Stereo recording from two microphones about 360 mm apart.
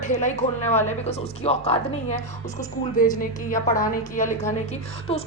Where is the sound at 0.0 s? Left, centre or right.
Centre.